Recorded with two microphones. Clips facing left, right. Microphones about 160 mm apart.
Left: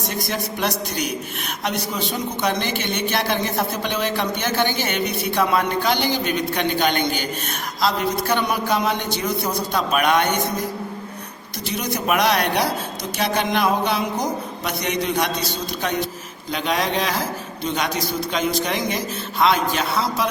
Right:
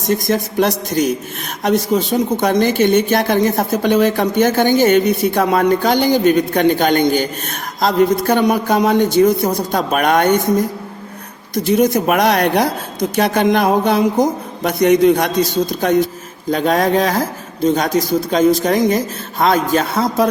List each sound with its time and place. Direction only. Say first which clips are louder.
0.3 s a man's voice: right 7 dB; 40° right (ahead or behind)
11.5 s speech: right 13 dB; 50° right (ahead or behind)